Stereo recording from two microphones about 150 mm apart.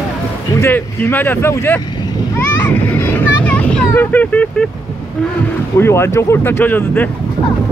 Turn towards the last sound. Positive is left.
turn(degrees=10)  # may be behind; listen again after turning